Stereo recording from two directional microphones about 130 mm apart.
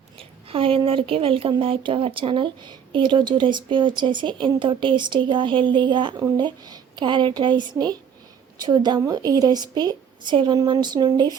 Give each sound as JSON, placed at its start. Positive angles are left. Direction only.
{"t": 0.2, "sound": "a woman's voice", "side_deg": -45}